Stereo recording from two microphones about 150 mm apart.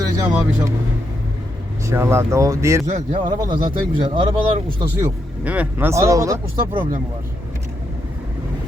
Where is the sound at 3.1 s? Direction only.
30° right (ahead or behind).